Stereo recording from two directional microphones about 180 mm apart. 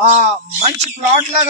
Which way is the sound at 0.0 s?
35° right (ahead or behind).